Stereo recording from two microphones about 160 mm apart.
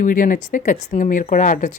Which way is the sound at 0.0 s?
55° left (ahead or behind).